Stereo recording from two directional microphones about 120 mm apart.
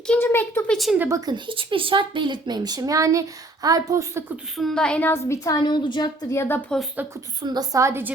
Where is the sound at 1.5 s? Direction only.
45° right (ahead or behind); by 4.2 s 30° right (ahead or behind).